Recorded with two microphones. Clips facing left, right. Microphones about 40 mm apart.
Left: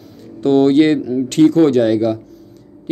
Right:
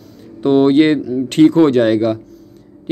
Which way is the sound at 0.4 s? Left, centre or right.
Centre.